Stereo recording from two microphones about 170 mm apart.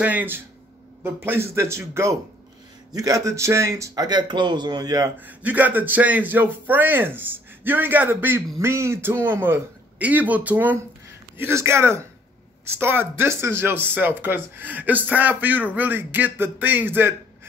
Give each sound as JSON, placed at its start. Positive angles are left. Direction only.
{"t": 0.0, "sound": "a man's voice", "side_deg": -10}
{"t": 5.2, "sound": "a man's voice", "side_deg": -10}